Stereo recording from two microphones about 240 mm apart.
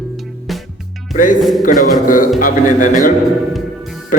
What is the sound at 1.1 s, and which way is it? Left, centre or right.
Music, left.